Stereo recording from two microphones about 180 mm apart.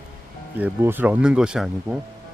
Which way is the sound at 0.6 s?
10° right (ahead or behind).